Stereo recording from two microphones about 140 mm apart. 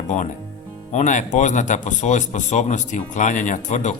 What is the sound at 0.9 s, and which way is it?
Speech, 60° left (ahead or behind).